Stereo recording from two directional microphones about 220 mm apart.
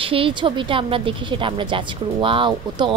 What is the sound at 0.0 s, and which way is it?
Speech, 25° right (ahead or behind).